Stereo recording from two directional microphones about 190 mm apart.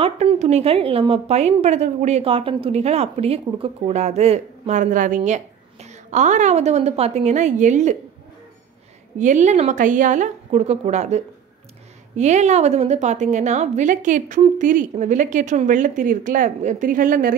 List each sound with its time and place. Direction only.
0.0 s a woman's voice: 30° right (ahead or behind)
9.2 s a woman's voice: 40° right (ahead or behind)